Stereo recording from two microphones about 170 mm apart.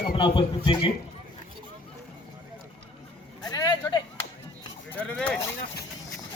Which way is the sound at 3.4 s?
20° left (ahead or behind).